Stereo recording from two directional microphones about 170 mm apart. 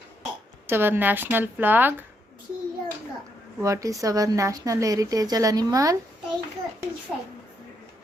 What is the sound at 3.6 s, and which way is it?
Speech, 20° right (ahead or behind).